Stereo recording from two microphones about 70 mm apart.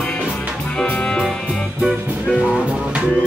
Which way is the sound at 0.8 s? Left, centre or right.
Left.